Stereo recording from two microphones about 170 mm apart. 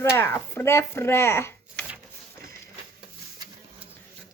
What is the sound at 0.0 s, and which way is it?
Speech, 15° left (ahead or behind).